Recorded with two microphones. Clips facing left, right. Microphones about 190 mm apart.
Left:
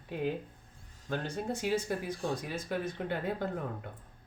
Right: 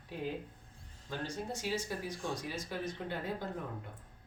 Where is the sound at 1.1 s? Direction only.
60° left (ahead or behind).